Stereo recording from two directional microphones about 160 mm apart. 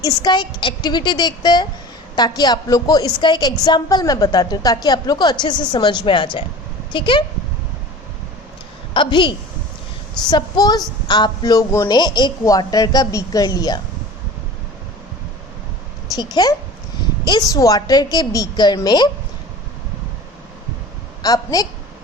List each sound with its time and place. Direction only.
0.0 s a woman's voice: 25° left (ahead or behind)
8.9 s a woman's voice: 30° left (ahead or behind)
16.1 s a woman's voice: 25° left (ahead or behind)
21.2 s a woman's voice: 25° left (ahead or behind)